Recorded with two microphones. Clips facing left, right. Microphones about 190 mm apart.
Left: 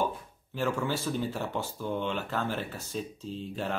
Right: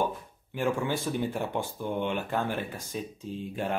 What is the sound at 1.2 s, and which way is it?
Speech, 15° right (ahead or behind).